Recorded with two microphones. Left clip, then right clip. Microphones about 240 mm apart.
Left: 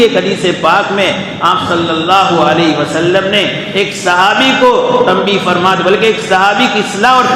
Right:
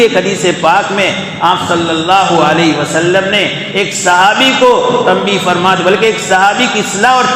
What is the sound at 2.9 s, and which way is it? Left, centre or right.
A man's voice, right.